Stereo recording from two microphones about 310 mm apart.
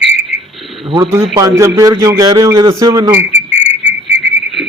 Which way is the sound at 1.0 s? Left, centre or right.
Centre.